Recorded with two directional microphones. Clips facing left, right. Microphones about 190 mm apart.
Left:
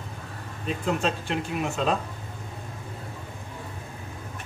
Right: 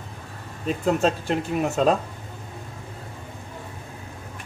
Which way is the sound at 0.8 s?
40° right (ahead or behind).